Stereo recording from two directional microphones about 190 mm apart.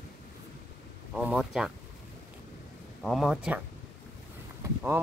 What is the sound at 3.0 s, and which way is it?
Speech, centre (ahead or behind).